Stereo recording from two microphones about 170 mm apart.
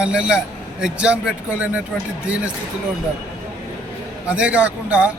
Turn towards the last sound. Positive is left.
turn(degrees=-10)  # may be behind; listen again after turning